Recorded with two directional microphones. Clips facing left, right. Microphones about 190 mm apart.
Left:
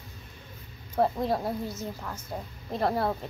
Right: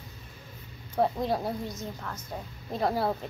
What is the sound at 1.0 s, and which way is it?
A woman's voice, centre (ahead or behind).